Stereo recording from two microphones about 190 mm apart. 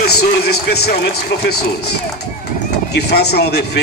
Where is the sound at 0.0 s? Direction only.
55° left (ahead or behind).